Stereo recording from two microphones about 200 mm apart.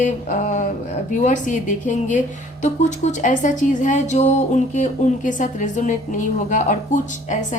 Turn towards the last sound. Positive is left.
turn(degrees=40)  # may be behind; listen again after turning